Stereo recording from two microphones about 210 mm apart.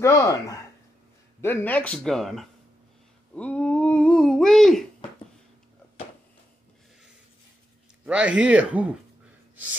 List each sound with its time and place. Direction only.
0.0 s speech: 15° left (ahead or behind)
3.3 s a sound: 5° left (ahead or behind)
8.0 s speech: 5° right (ahead or behind)